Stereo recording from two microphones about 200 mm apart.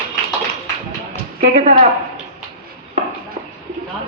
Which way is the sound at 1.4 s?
35° right (ahead or behind).